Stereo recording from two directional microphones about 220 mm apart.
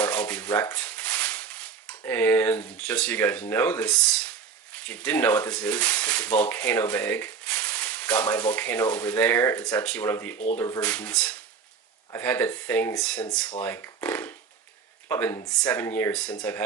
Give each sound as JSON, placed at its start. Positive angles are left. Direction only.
{"t": 0.0, "sound": "maraca", "side_deg": 5}
{"t": 3.5, "sound": "speech", "side_deg": 10}
{"t": 10.3, "sound": "speech", "side_deg": 35}
{"t": 10.6, "sound": "speech", "side_deg": 10}